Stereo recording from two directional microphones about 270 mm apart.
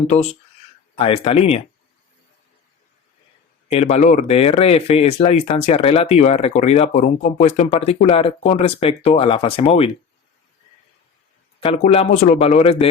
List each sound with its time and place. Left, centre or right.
0.9 s speech: left
3.7 s speech: left
11.6 s speech: left